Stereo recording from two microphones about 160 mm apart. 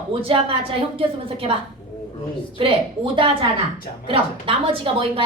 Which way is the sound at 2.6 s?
30° right (ahead or behind).